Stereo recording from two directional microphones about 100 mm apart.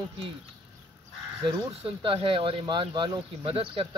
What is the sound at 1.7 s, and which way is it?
Speech, 60° right (ahead or behind).